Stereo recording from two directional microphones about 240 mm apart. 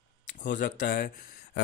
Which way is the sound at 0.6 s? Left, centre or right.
Left.